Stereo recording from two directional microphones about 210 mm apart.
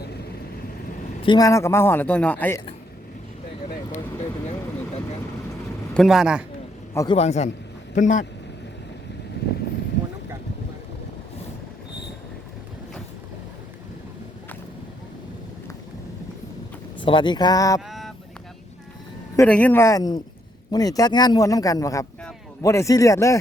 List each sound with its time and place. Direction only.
1.2 s speech: 20° left (ahead or behind)
5.9 s a man's voice: centre (ahead or behind)
6.9 s speech: 15° left (ahead or behind)
7.2 s a man's voice: 30° left (ahead or behind)
17.0 s speech: 25° left (ahead or behind)
17.7 s a sound: centre (ahead or behind)
19.4 s speech: 5° left (ahead or behind)